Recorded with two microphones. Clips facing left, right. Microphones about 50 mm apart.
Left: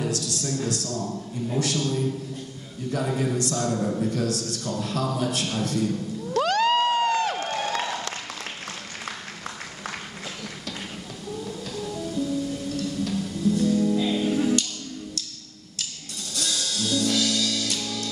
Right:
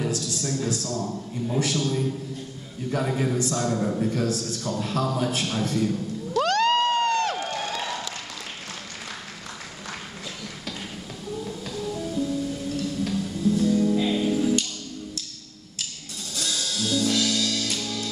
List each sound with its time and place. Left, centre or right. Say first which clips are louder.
0.0 s a man's voice: even; centre
6.4 s cheering: even; centre
7.4 s crowd: left 2 dB; centre
11.3 s music: right 1 dB; centre
16.3 s music: even; centre